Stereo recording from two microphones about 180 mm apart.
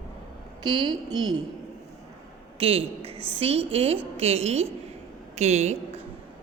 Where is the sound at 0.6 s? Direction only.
25° right (ahead or behind).